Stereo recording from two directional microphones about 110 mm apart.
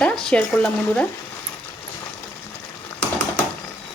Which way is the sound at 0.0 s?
10° left (ahead or behind).